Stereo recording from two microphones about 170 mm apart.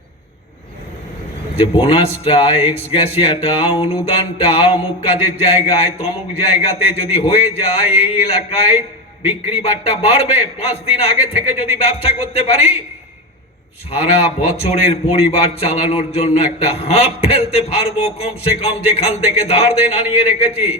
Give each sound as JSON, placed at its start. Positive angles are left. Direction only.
{"t": 1.5, "sound": "a man's voice", "side_deg": 35}
{"t": 13.9, "sound": "a man's voice", "side_deg": 35}